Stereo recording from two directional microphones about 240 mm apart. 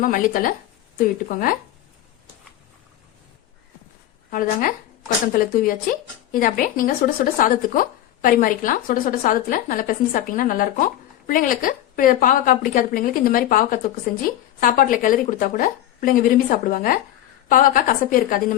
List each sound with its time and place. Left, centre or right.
0.0 s a woman's voice: left
4.3 s a woman's voice: left